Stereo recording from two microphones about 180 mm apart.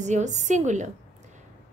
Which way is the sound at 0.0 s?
40° right (ahead or behind).